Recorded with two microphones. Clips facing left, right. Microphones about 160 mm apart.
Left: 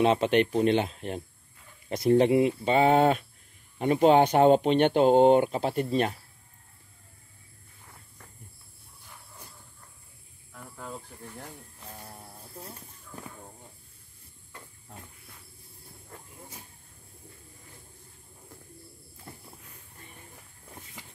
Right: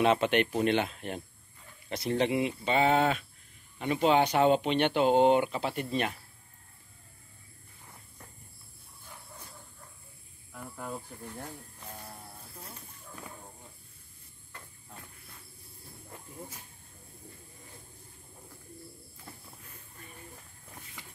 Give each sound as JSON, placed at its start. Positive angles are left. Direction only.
{"t": 0.0, "sound": "speech", "side_deg": 35}
{"t": 10.5, "sound": "speech", "side_deg": -5}